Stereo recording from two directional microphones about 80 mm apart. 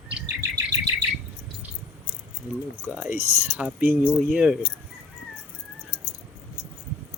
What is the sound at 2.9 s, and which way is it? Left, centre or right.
Speech, right.